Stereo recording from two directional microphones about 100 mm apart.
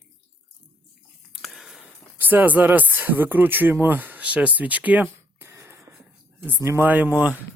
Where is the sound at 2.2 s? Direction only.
15° right (ahead or behind).